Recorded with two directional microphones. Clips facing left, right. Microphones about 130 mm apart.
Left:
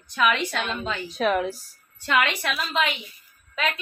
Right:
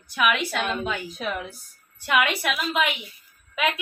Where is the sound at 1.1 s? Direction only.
90° left.